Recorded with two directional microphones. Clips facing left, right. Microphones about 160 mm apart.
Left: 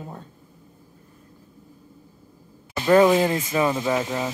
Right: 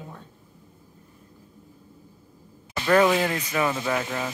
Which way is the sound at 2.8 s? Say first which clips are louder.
Left 4 dB; 20° left (ahead or behind).